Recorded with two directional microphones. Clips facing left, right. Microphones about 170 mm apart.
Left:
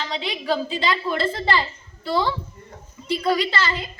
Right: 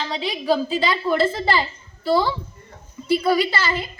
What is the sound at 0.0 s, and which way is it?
A woman's voice, 5° right (ahead or behind).